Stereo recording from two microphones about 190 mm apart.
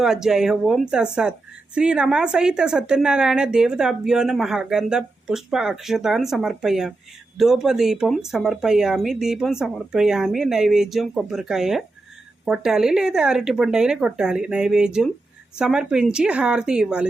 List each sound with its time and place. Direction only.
0.0 s a woman's voice: 5° right (ahead or behind)